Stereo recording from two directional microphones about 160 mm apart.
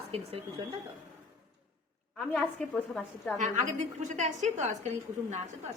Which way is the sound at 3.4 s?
50° right (ahead or behind).